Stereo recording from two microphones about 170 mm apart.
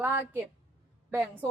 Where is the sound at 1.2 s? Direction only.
10° left (ahead or behind).